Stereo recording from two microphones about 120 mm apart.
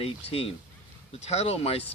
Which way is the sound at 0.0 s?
55° left (ahead or behind).